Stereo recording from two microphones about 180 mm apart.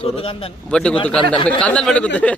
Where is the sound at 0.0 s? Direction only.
30° left (ahead or behind).